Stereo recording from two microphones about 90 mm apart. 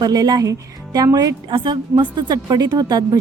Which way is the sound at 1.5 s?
65° right (ahead or behind).